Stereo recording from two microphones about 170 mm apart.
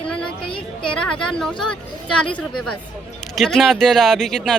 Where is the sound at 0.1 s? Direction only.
5° left (ahead or behind).